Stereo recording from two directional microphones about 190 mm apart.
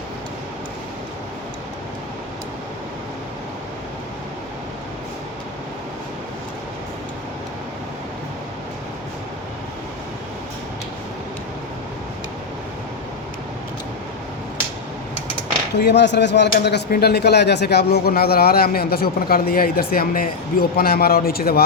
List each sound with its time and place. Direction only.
15.7 s speech: 60° left (ahead or behind)